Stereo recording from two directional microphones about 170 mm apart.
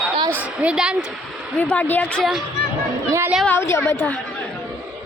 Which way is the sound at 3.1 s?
15° right (ahead or behind).